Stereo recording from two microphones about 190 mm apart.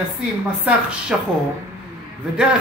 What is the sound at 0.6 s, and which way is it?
Speech, 5° right (ahead or behind).